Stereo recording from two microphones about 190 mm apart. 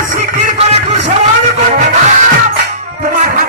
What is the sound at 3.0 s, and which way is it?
Music, 45° right (ahead or behind).